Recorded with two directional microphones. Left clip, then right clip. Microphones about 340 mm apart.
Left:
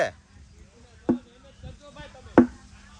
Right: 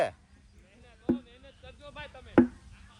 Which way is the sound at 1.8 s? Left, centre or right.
Right.